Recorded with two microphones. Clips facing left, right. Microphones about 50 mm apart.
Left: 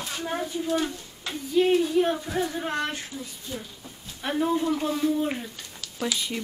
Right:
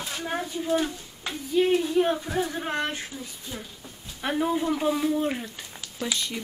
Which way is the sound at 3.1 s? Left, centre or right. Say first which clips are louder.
Left 1 dB; centre.